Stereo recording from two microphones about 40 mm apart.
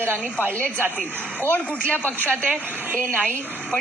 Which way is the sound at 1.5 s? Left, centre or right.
Left.